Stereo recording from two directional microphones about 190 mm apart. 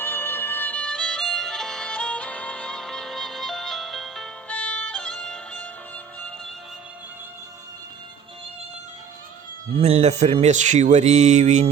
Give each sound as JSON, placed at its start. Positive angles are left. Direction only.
{"t": 0.0, "sound": "music", "side_deg": 10}
{"t": 9.7, "sound": "speech", "side_deg": -30}